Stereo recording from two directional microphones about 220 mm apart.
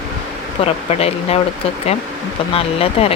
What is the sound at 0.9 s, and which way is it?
Speech, 25° left (ahead or behind).